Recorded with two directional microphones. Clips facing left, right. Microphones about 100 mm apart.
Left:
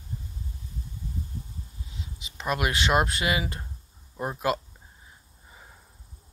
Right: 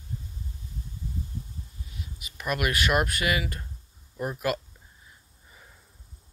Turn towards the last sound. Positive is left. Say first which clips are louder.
# left 1 dB
turn(degrees=25)  # may be behind; listen again after turning